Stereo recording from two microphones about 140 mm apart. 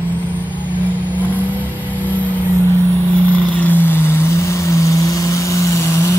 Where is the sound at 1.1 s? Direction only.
10° left (ahead or behind).